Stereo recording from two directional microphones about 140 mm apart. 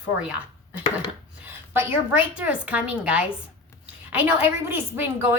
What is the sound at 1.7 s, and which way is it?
A woman's voice, 15° right (ahead or behind).